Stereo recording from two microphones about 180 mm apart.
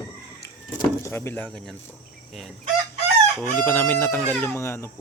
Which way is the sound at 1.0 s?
15° left (ahead or behind).